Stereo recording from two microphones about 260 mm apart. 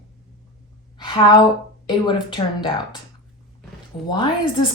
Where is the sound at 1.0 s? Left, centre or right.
Centre.